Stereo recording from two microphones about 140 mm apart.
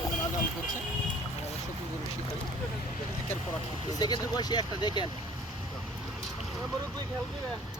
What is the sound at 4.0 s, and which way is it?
Speech, 30° left (ahead or behind).